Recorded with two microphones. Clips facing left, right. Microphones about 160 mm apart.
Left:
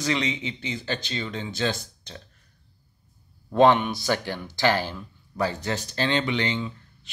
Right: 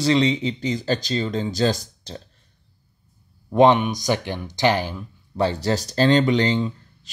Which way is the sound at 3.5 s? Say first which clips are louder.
Right 3 dB; 15° right (ahead or behind).